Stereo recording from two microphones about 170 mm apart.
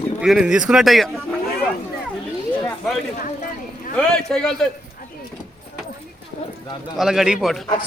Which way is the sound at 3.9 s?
5° left (ahead or behind).